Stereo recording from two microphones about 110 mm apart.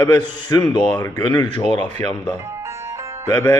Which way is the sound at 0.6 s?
50° left (ahead or behind).